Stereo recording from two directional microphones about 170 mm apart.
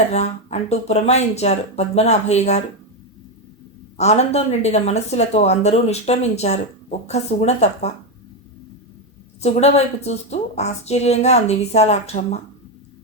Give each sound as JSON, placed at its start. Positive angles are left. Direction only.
{"t": 0.1, "sound": "a woman's voice", "side_deg": 40}
{"t": 3.9, "sound": "a woman's voice", "side_deg": 40}
{"t": 9.4, "sound": "a woman's voice", "side_deg": 40}